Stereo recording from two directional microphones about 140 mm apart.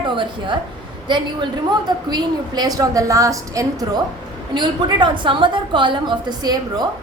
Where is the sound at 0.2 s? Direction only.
35° right (ahead or behind).